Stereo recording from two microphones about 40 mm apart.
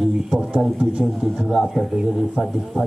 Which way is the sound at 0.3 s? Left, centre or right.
Right.